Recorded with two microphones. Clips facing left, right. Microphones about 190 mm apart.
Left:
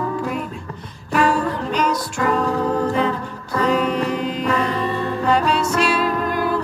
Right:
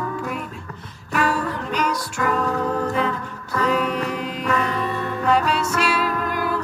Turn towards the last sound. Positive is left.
turn(degrees=35)  # may be behind; listen again after turning